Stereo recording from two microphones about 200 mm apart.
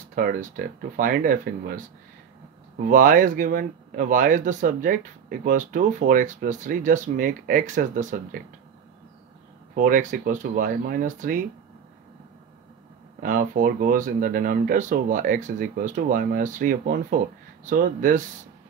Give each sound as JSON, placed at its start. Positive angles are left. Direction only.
{"t": 0.1, "sound": "speech", "side_deg": -45}
{"t": 2.8, "sound": "speech", "side_deg": -45}
{"t": 9.8, "sound": "speech", "side_deg": -45}
{"t": 13.2, "sound": "speech", "side_deg": -40}